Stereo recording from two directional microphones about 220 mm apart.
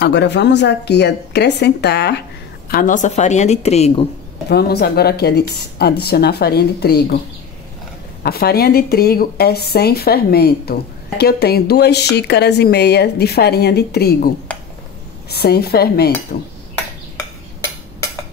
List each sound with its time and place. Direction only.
0.0 s speech: 50° left (ahead or behind)
2.7 s a woman's voice: 35° left (ahead or behind)
4.5 s speech: 45° left (ahead or behind)
8.2 s a woman's voice: 45° left (ahead or behind)